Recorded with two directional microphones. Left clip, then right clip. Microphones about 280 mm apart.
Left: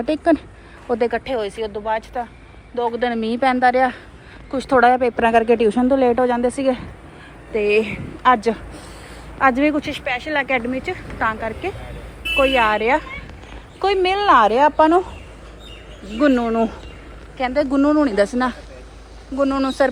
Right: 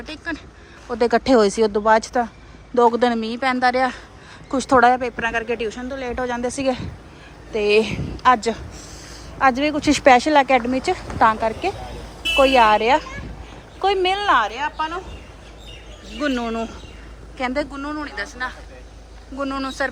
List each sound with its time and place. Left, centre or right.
0.0 s a woman's voice: centre
0.9 s speech: centre
1.2 s a woman's voice: right; by 9.9 s centre
10.1 s a woman's voice: right; by 14.5 s centre
14.5 s speech: centre
16.1 s a woman's voice: centre